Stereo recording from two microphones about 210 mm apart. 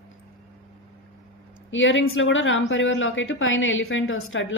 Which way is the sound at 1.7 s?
65° left (ahead or behind).